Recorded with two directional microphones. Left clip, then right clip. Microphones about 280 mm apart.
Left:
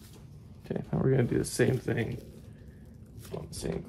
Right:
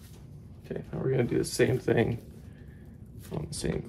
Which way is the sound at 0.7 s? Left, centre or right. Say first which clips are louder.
Left 2 dB; left.